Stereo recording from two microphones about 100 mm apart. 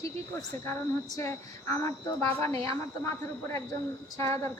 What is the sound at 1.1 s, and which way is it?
A woman's voice, 30° left (ahead or behind).